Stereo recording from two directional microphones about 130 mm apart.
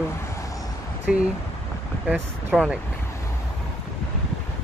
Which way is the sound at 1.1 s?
5° right (ahead or behind).